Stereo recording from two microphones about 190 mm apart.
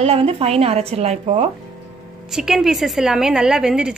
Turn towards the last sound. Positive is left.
turn(degrees=-5)  # may be behind; listen again after turning